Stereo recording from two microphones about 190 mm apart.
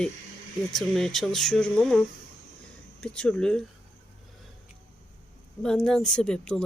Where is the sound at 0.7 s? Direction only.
Centre (ahead or behind).